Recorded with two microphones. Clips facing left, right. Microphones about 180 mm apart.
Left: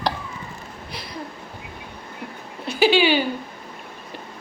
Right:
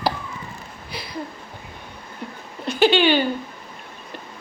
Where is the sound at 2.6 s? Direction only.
5° left (ahead or behind).